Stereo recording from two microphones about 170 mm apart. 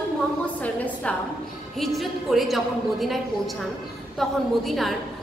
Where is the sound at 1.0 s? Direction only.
5° left (ahead or behind).